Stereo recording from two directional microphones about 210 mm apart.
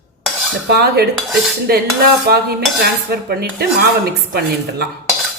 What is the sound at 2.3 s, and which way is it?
A woman's voice, 50° right (ahead or behind).